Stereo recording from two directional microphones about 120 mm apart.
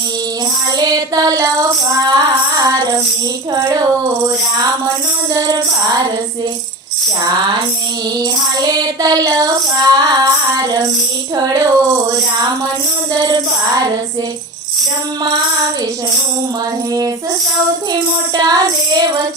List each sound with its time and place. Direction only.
0.8 s child singing: 30° right (ahead or behind)
3.5 s speech: 30° right (ahead or behind)
5.3 s speech: 30° right (ahead or behind)
8.2 s child singing: 35° right (ahead or behind)
13.1 s child singing: 35° right (ahead or behind)
18.3 s child singing: 35° right (ahead or behind)